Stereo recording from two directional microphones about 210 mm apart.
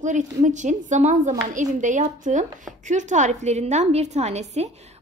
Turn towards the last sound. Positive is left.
turn(degrees=-30)  # may be behind; listen again after turning